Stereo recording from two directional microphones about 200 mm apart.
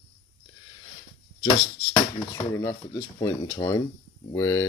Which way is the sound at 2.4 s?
15° left (ahead or behind).